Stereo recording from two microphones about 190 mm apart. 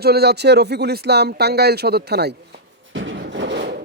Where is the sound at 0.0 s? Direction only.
60° right (ahead or behind).